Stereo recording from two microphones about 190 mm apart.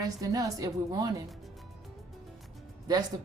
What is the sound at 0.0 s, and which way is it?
Speech, 20° right (ahead or behind).